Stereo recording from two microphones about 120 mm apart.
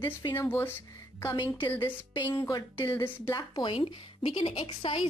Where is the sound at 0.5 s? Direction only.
15° left (ahead or behind).